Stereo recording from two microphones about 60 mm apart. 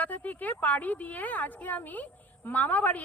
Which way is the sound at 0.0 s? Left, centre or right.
Left.